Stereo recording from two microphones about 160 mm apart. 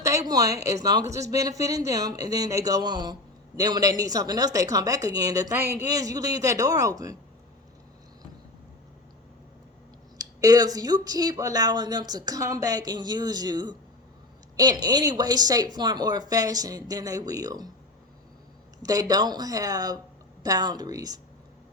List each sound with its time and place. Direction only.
0.0 s speech: 20° right (ahead or behind)
10.2 s speech: 25° right (ahead or behind)
18.8 s speech: 25° right (ahead or behind)